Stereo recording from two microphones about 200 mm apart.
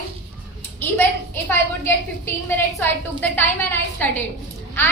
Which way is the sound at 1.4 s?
10° left (ahead or behind).